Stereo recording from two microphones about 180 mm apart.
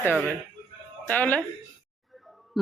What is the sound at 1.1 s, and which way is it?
Speech, 10° left (ahead or behind).